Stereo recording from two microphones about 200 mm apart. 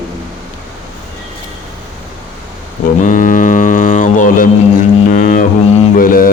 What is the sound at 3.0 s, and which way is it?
Mantra, 40° left (ahead or behind).